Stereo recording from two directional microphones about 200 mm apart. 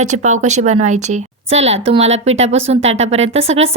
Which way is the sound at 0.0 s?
35° right (ahead or behind).